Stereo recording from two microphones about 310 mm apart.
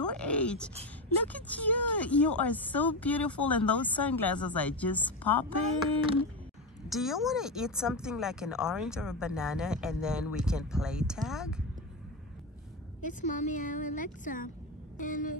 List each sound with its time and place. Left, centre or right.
0.1 s a sound: centre
1.2 s speech: centre
6.9 s speech: centre
13.2 s a woman's voice: left